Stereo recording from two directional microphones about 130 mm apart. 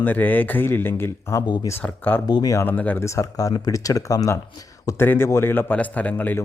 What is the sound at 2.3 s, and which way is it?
Speech, 30° left (ahead or behind).